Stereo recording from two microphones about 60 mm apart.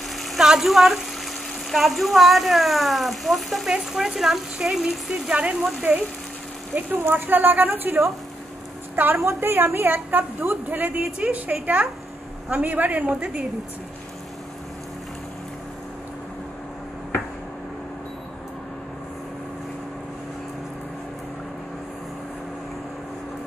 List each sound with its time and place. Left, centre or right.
0.2 s a sound: centre
0.5 s speech: centre
6.7 s a woman's voice: right
9.2 s a woman's voice: right